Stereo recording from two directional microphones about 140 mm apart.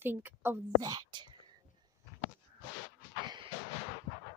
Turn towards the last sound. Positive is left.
turn(degrees=-35)  # may be behind; listen again after turning